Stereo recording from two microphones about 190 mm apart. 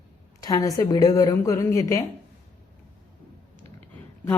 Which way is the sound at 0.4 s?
20° left (ahead or behind).